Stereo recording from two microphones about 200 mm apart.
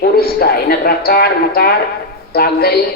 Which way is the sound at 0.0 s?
50° left (ahead or behind).